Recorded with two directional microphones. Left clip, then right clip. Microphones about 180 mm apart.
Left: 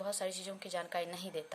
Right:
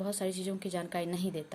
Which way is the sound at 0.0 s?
Centre (ahead or behind).